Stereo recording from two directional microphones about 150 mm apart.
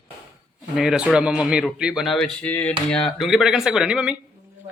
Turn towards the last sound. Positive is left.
turn(degrees=-5)  # may be behind; listen again after turning